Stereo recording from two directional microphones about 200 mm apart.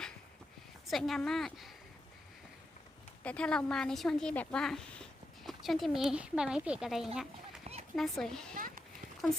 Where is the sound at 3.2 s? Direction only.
5° left (ahead or behind).